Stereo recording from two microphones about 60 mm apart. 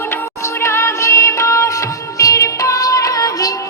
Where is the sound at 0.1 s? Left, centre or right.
Left.